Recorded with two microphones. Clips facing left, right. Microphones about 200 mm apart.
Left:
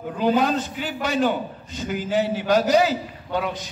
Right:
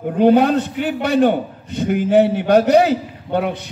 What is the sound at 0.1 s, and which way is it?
A man's voice, 60° right (ahead or behind).